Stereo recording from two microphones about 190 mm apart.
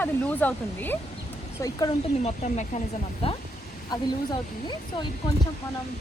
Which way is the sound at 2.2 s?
40° left (ahead or behind).